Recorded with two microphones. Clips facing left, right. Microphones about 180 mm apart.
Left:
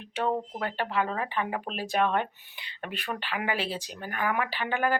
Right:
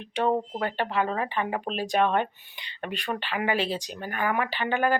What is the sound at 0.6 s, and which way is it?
Speech, centre (ahead or behind).